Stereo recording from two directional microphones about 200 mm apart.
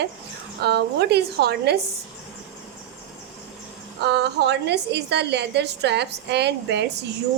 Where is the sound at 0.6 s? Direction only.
55° right (ahead or behind).